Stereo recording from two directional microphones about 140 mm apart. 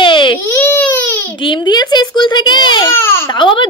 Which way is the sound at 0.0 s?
35° left (ahead or behind).